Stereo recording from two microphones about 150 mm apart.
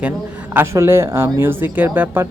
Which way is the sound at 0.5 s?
15° right (ahead or behind).